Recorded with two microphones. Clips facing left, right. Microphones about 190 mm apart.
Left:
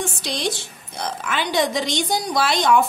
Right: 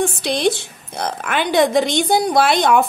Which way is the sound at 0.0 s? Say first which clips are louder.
Right 8 dB; 60° right (ahead or behind).